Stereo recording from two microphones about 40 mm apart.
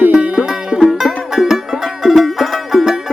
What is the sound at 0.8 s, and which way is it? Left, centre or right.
Music, centre.